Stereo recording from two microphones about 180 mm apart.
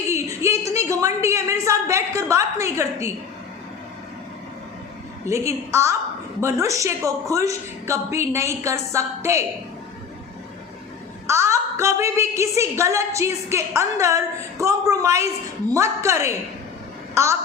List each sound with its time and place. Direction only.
0.1 s a woman's voice: 15° right (ahead or behind)
5.2 s a woman's voice: 15° right (ahead or behind)
11.3 s a woman's voice: 15° right (ahead or behind)